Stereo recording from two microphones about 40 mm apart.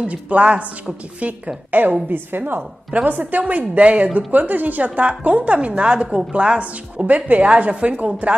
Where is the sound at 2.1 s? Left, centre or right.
Right.